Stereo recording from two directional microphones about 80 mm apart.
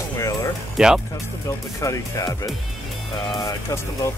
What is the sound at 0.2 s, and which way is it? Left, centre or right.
Music, left.